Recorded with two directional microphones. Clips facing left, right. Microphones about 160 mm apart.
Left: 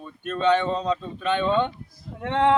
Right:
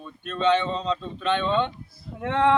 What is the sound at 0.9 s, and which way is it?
Speech, 10° left (ahead or behind).